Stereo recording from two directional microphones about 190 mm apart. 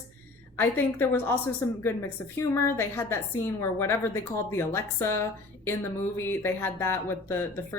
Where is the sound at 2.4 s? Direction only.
10° left (ahead or behind).